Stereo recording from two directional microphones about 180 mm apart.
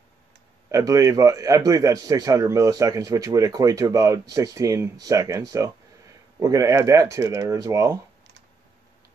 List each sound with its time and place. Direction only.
0.7 s speech: 15° right (ahead or behind)